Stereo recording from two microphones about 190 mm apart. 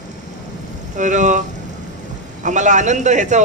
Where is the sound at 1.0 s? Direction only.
40° right (ahead or behind).